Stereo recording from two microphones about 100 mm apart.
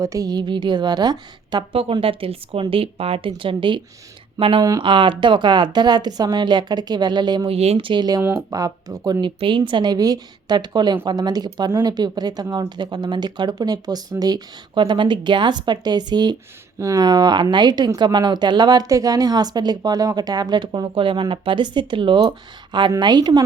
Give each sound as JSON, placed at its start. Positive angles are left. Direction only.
{"t": 0.0, "sound": "speech", "side_deg": -35}
{"t": 1.7, "sound": "speech", "side_deg": -65}
{"t": 7.4, "sound": "speech", "side_deg": -90}
{"t": 8.2, "sound": "speech", "side_deg": -25}
{"t": 9.2, "sound": "speech", "side_deg": -55}